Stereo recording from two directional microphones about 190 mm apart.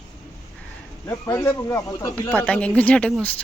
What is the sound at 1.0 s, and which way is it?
Speech, 15° left (ahead or behind).